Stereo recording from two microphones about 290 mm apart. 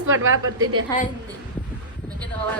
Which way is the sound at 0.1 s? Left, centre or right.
Right.